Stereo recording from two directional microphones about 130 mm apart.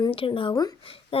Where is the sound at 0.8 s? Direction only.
45° left (ahead or behind).